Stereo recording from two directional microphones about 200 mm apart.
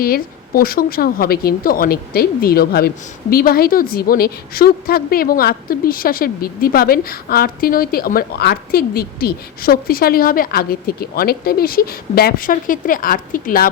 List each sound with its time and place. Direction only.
0.0 s a woman's voice: 50° left (ahead or behind)